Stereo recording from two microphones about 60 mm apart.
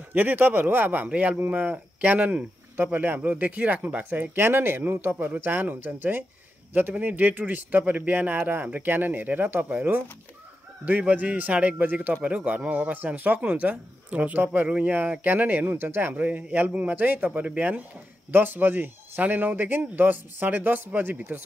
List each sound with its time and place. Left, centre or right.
0.1 s a man's voice: right
10.9 s a man's voice: right
16.2 s a man's voice: right
18.3 s a man's voice: right